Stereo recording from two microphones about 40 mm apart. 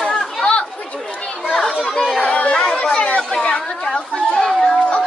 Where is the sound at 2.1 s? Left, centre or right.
Left.